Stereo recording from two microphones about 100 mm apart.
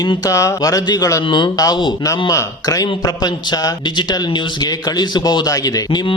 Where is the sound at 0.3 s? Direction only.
30° left (ahead or behind).